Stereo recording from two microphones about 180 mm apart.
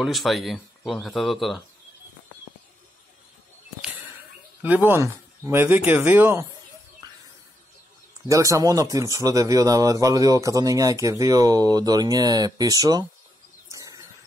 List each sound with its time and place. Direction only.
0.0 s speech: centre (ahead or behind)
4.6 s speech: 10° right (ahead or behind)
8.3 s speech: 20° right (ahead or behind)
13.7 s bird: 20° right (ahead or behind)